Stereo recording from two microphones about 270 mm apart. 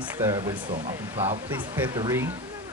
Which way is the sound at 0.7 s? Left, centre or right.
Right.